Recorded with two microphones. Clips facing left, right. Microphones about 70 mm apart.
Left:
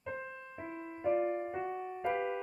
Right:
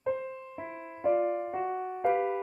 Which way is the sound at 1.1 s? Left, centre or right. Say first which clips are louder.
Right 3 dB; right.